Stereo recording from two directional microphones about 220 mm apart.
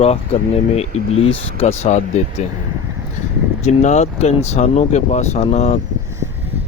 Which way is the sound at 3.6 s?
30° left (ahead or behind).